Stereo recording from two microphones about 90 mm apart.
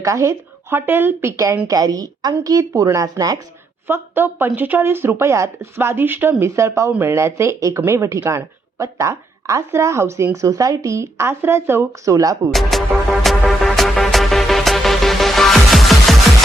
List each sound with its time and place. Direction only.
0.0 s speech: 35° right (ahead or behind)
1.6 s a woman's voice: 45° right (ahead or behind)
3.8 s speech: 25° right (ahead or behind)
6.4 s a woman's voice: 35° right (ahead or behind)
12.1 s a woman's voice: 40° right (ahead or behind)
12.5 s music: centre (ahead or behind)